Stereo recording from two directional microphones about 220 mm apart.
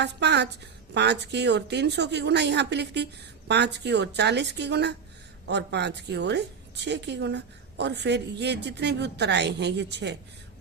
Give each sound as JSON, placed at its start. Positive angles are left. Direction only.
{"t": 0.0, "sound": "a woman's voice", "side_deg": -50}